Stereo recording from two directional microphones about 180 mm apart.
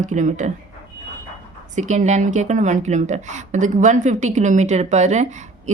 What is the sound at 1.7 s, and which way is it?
A woman's voice, 40° right (ahead or behind).